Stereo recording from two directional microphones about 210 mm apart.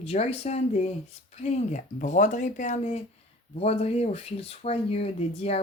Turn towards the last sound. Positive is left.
turn(degrees=30)  # may be behind; listen again after turning